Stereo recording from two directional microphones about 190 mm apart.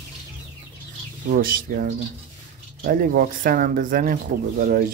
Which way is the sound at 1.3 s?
45° right (ahead or behind).